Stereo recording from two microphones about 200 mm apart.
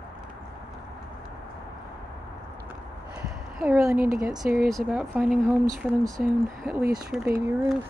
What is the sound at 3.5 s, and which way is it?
A woman's voice, 5° right (ahead or behind).